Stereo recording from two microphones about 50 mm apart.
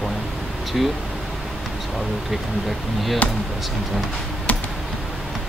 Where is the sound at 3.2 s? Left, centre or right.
Left.